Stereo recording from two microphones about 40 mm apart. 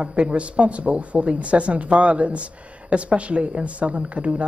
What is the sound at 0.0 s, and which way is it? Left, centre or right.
Speech, right.